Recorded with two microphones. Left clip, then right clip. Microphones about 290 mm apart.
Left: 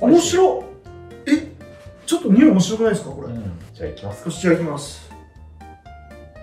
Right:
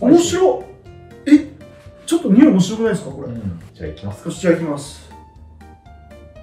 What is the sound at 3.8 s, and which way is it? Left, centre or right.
Speech, centre.